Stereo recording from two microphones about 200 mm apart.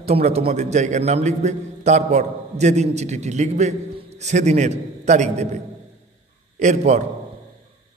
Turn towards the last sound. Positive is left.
turn(degrees=-35)  # may be behind; listen again after turning